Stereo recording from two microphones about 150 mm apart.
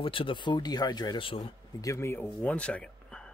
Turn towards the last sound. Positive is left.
turn(degrees=5)  # may be behind; listen again after turning